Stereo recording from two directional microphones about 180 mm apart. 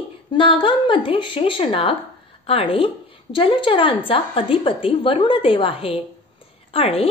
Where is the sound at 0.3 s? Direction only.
30° left (ahead or behind).